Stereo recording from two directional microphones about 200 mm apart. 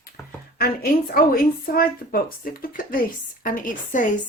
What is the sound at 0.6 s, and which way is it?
A woman's voice, 50° left (ahead or behind).